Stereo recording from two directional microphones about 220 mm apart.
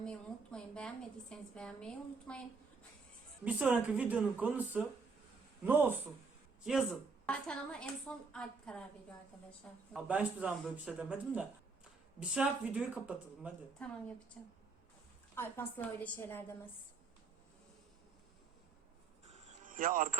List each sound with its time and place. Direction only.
0.0 s a woman's voice: 5° left (ahead or behind)
3.4 s a woman's voice: 5° right (ahead or behind)
13.8 s a woman's voice: 5° left (ahead or behind)
15.4 s a woman's voice: 10° left (ahead or behind)
19.3 s music: 35° right (ahead or behind)